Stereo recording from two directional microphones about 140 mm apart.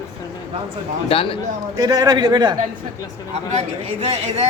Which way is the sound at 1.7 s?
25° right (ahead or behind).